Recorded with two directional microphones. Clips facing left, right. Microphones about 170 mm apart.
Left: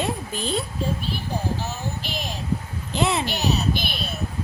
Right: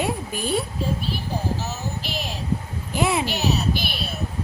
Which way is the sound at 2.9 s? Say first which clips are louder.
Right 1 dB; 10° right (ahead or behind).